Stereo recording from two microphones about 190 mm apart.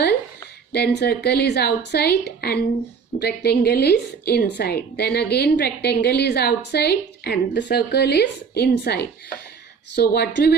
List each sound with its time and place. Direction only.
0.7 s a woman's voice: 60° left (ahead or behind)